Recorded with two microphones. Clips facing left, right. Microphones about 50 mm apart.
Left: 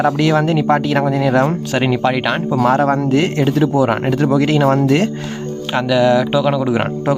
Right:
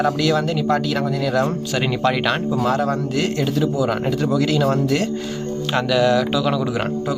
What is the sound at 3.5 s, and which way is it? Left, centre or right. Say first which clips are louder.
Speech: left 5 dB; left.